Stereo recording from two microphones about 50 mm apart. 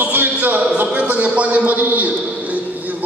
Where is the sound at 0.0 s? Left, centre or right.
Right.